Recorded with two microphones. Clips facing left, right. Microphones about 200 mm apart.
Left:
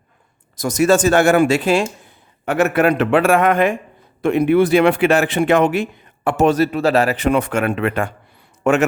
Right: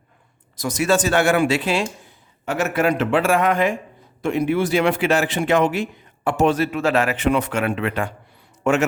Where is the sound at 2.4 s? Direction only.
60° left (ahead or behind).